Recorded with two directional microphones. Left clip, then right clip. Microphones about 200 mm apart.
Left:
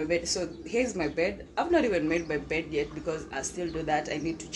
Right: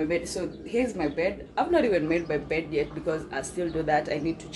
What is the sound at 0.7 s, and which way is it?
Speech, 25° left (ahead or behind).